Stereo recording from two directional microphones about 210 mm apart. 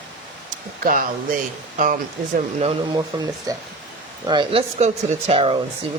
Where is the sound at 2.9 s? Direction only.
15° right (ahead or behind).